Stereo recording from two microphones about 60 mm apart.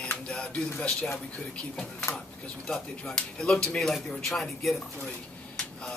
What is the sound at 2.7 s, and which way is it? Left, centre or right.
A man's voice, centre.